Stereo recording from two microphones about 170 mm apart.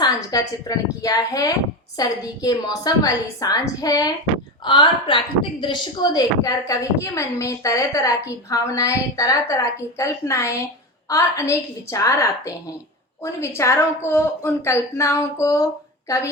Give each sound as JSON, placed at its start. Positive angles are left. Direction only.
{"t": 0.0, "sound": "a woman's voice", "side_deg": 20}